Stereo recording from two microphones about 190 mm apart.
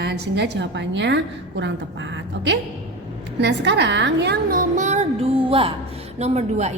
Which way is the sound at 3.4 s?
70° right (ahead or behind).